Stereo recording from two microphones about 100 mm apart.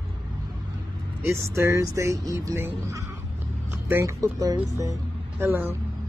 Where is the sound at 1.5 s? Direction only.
30° right (ahead or behind).